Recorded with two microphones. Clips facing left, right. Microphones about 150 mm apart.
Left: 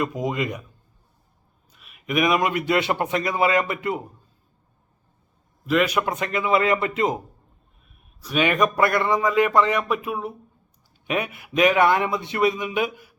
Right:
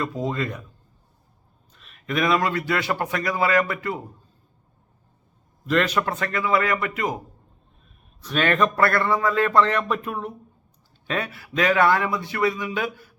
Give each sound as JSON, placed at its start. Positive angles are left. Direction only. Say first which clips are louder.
{"t": 0.0, "sound": "a man's voice", "louder": "left 1 dB", "side_deg": 15}
{"t": 1.7, "sound": "a man's voice", "louder": "left 2 dB", "side_deg": 10}
{"t": 5.6, "sound": "a man's voice", "louder": "left 1 dB", "side_deg": 10}
{"t": 8.2, "sound": "a man's voice", "louder": "left 1 dB", "side_deg": 10}
{"t": 11.0, "sound": "a man's voice", "louder": "left 2 dB", "side_deg": 20}